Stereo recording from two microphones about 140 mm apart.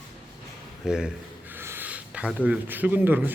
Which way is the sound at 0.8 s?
5° right (ahead or behind).